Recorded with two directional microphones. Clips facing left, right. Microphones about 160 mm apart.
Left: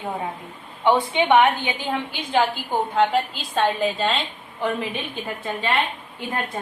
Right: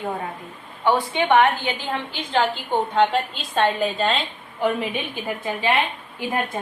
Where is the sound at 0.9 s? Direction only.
20° left (ahead or behind); by 4.7 s centre (ahead or behind).